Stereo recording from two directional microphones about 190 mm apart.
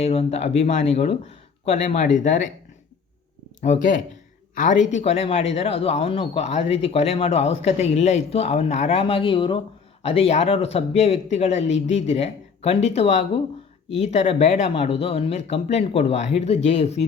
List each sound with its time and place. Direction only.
0.0 s speech: 30° left (ahead or behind)
4.5 s speech: 45° left (ahead or behind)
11.6 s speech: 75° left (ahead or behind)
12.0 s speech: 35° left (ahead or behind)